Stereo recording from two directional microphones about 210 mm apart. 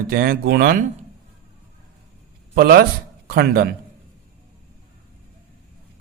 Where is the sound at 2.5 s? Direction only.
50° right (ahead or behind).